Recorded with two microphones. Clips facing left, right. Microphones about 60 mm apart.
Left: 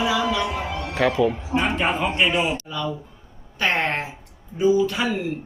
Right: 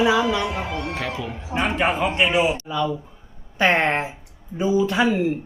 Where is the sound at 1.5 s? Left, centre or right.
Centre.